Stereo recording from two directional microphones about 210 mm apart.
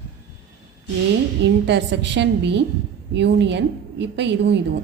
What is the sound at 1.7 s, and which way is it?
A woman's voice, 55° right (ahead or behind).